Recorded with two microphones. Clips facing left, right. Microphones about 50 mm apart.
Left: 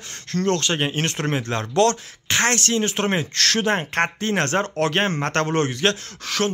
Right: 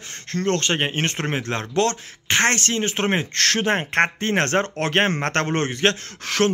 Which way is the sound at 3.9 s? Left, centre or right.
Right.